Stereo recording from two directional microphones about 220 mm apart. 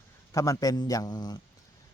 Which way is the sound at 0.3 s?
15° left (ahead or behind).